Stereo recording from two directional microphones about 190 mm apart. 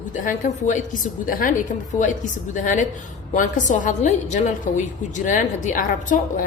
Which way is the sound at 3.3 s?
40° left (ahead or behind).